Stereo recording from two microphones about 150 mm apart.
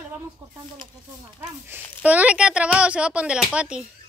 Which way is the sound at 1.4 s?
15° right (ahead or behind).